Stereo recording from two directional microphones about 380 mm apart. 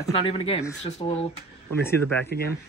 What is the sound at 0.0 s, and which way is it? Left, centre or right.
Speech, centre.